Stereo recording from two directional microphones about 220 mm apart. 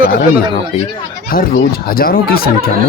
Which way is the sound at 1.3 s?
40° left (ahead or behind).